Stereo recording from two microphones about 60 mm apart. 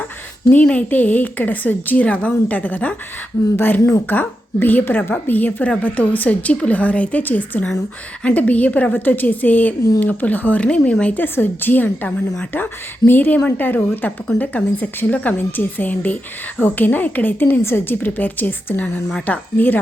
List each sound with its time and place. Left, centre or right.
0.5 s a woman's voice: left
4.0 s a woman's voice: left
17.6 s a woman's voice: left